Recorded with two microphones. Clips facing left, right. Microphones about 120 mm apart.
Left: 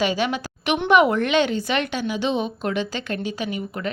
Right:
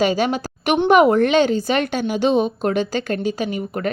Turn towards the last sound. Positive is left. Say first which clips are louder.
# right 4 dB
turn(degrees=-40)  # may be behind; listen again after turning